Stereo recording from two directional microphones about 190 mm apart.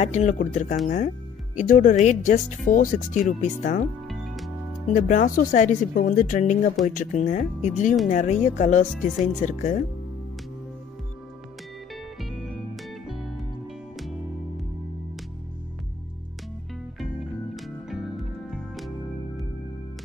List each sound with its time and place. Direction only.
0.0 s speech: 35° left (ahead or behind)
4.9 s speech: 40° left (ahead or behind)
11.9 s music: centre (ahead or behind)
17.6 s music: centre (ahead or behind)